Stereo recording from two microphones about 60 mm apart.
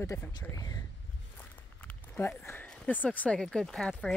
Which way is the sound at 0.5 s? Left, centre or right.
Left.